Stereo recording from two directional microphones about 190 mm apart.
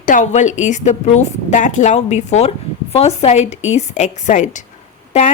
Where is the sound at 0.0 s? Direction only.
40° left (ahead or behind).